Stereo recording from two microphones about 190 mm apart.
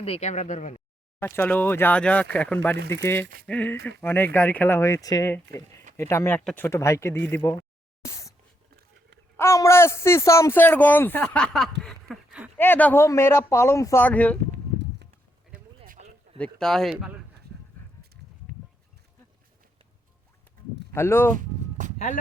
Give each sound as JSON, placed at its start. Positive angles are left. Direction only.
{"t": 0.0, "sound": "speech", "side_deg": 35}
{"t": 1.2, "sound": "a man's voice", "side_deg": 10}
{"t": 8.0, "sound": "a sound", "side_deg": 15}
{"t": 9.4, "sound": "a man's voice", "side_deg": 15}
{"t": 11.8, "sound": "a sound", "side_deg": 0}
{"t": 12.5, "sound": "a man's voice", "side_deg": 10}
{"t": 15.9, "sound": "a sound", "side_deg": -35}
{"t": 16.4, "sound": "speech", "side_deg": 5}
{"t": 18.0, "sound": "a sound", "side_deg": -55}
{"t": 20.9, "sound": "a man's voice", "side_deg": 10}
{"t": 21.3, "sound": "music", "side_deg": -40}
{"t": 21.9, "sound": "speech", "side_deg": 40}